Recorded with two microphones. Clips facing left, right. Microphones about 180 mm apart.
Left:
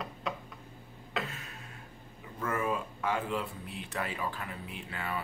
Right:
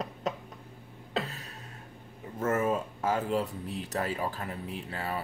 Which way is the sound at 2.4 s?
45° right (ahead or behind).